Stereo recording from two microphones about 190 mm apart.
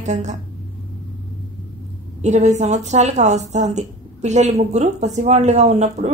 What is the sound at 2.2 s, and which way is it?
A woman's voice, 40° right (ahead or behind).